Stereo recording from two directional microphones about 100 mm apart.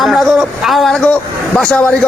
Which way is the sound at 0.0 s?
Centre (ahead or behind).